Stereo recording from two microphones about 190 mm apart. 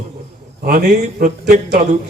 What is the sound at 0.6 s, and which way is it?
A man's voice, 50° right (ahead or behind).